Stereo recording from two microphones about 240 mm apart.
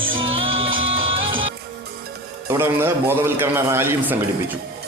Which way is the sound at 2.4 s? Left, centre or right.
Centre.